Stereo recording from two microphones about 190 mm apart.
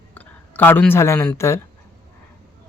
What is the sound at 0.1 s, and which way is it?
Speech, 10° left (ahead or behind).